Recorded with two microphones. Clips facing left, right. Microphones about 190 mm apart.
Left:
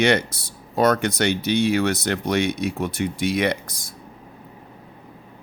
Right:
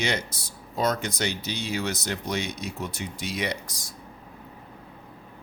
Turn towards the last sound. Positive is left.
turn(degrees=55)  # may be behind; listen again after turning